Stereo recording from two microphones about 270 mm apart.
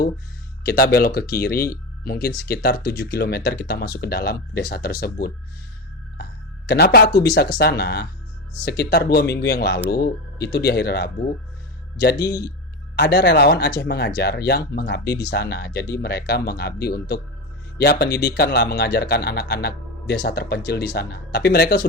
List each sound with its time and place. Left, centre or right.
0.6 s speech: left
6.7 s speech: left
13.0 s speech: left